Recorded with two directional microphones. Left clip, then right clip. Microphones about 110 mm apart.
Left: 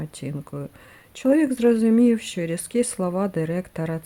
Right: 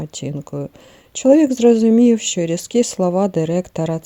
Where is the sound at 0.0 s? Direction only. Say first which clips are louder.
Right 6 dB; 30° right (ahead or behind).